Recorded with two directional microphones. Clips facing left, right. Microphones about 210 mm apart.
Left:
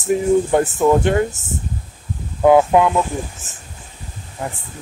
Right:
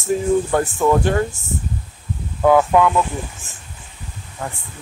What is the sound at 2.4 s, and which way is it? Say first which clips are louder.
Speech: left 2 dB; 20° left (ahead or behind).